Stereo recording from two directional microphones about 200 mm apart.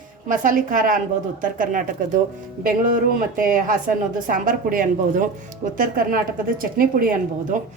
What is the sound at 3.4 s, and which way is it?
A woman's voice, 45° right (ahead or behind).